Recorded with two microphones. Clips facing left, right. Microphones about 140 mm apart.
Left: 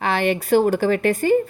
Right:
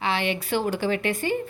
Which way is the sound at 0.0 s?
45° left (ahead or behind).